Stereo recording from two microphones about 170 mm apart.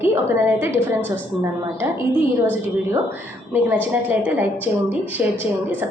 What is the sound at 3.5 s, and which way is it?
A woman's voice, 10° right (ahead or behind).